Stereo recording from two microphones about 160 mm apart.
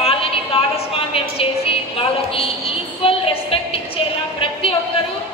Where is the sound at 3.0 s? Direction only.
35° left (ahead or behind).